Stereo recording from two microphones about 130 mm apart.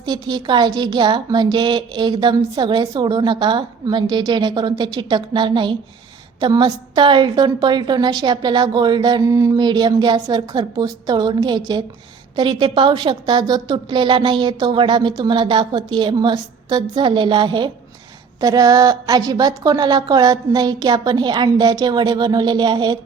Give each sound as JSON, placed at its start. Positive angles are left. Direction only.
{"t": 0.0, "sound": "a woman's voice", "side_deg": -35}